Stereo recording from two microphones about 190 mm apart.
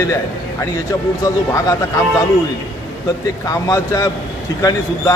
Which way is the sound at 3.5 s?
15° left (ahead or behind).